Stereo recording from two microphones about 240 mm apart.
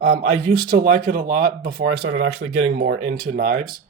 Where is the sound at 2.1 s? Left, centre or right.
Right.